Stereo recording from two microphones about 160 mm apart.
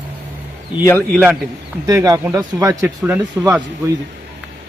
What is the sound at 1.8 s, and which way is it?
Speech, 20° right (ahead or behind).